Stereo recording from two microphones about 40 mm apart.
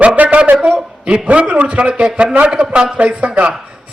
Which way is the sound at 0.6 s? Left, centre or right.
Right.